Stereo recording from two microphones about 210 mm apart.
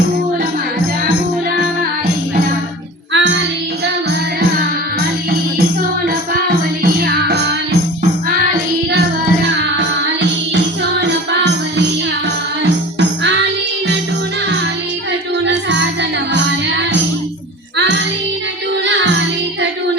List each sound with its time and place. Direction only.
3.1 s music: 60° right (ahead or behind)
6.8 s music: 50° right (ahead or behind)
11.0 s music: 55° right (ahead or behind)
16.3 s music: 55° right (ahead or behind)
17.7 s child singing: 55° right (ahead or behind)